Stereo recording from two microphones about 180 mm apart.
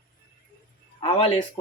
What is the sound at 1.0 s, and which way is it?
Speech, 30° left (ahead or behind).